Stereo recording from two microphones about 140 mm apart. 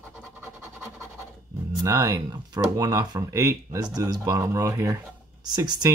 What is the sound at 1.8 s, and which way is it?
Speech, 25° right (ahead or behind).